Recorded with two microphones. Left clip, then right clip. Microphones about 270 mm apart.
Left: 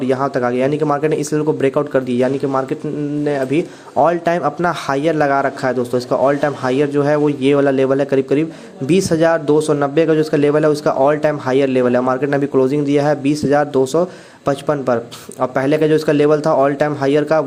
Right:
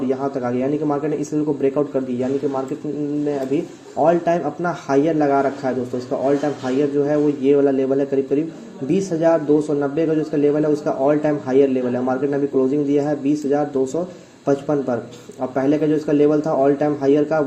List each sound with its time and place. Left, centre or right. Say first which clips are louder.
0.1 s a man's voice: left 8 dB; left
4.0 s a man's voice: left 2 dB; left